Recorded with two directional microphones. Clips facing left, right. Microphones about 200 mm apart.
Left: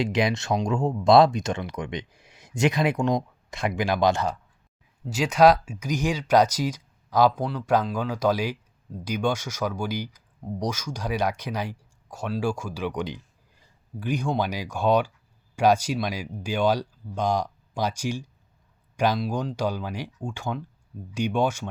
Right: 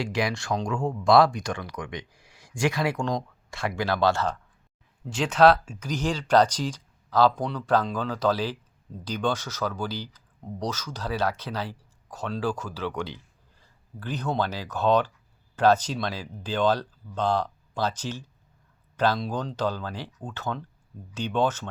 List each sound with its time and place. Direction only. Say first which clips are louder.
0.0 s speech: left 4 dB; 20° left (ahead or behind)